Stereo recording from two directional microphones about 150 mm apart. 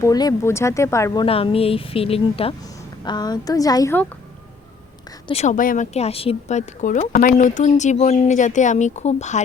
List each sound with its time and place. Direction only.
0.0 s speech: 25° left (ahead or behind)
1.2 s speech: 40° left (ahead or behind)
3.0 s speech: 30° left (ahead or behind)
5.3 s speech: 45° left (ahead or behind)
5.5 s speech: 60° left (ahead or behind)